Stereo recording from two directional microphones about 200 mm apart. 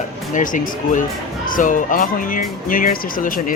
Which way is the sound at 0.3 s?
40° left (ahead or behind).